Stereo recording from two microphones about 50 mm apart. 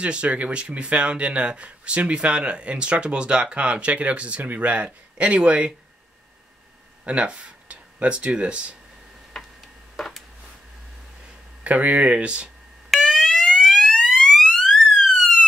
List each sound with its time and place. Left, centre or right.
0.0 s speech: right
7.1 s speech: right
9.9 s a sound: centre
11.6 s speech: right
12.9 s fire alarm: centre
14.4 s siren: centre